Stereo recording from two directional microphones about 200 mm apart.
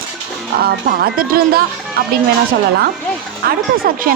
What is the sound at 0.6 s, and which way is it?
Speech, 50° right (ahead or behind).